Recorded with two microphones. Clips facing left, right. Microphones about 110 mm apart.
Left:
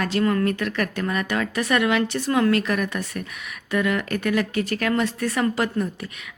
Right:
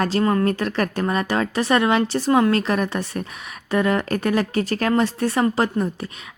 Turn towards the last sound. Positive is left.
turn(degrees=-30)  # may be behind; listen again after turning